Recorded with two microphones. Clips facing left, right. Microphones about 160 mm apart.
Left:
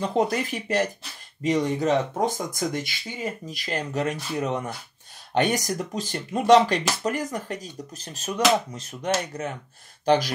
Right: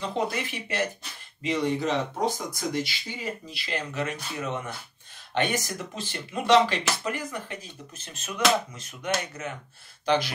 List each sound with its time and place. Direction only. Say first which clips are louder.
0.3 s speech: left 6 dB; 40° left (ahead or behind)